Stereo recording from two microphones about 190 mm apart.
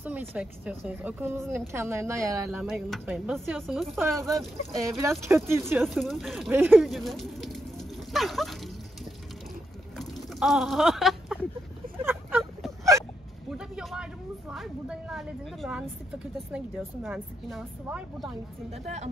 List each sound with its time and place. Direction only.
0.0 s speech: 10° right (ahead or behind)
2.6 s speech: 5° right (ahead or behind)
4.3 s speech: 15° right (ahead or behind)
5.9 s speech: centre (ahead or behind)
6.5 s a sound: 10° right (ahead or behind)
9.9 s a sound: centre (ahead or behind)
13.5 s vehicle: centre (ahead or behind)
14.5 s a woman's voice: centre (ahead or behind)
18.7 s speech: 35° right (ahead or behind)